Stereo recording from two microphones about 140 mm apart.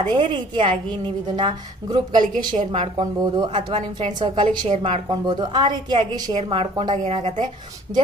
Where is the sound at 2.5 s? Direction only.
55° right (ahead or behind).